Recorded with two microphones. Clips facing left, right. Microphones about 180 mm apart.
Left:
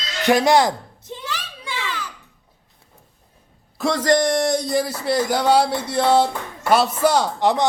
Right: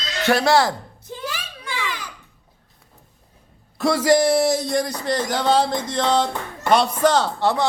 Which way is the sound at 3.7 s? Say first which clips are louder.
Right 1 dB; 5° right (ahead or behind).